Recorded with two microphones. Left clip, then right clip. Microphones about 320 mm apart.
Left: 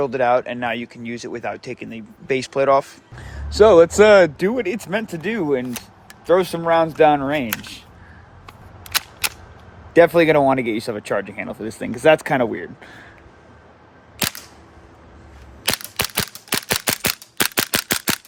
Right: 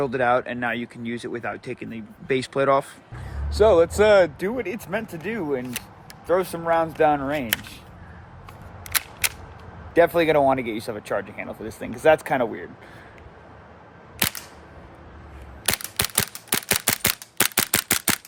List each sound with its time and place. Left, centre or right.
0.0 s speech: centre
3.2 s speech: left
9.9 s speech: left
16.2 s a sound: centre